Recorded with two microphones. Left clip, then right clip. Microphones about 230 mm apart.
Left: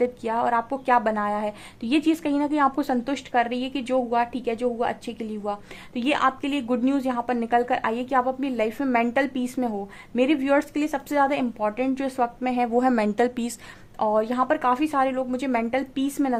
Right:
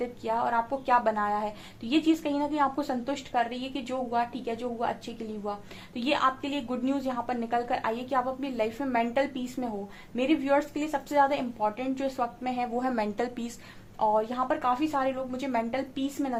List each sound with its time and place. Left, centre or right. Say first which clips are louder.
0.0 s a woman's voice: left 5 dB; left